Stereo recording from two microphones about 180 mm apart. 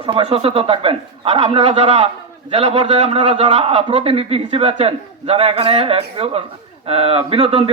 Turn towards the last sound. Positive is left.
turn(degrees=-35)  # may be behind; listen again after turning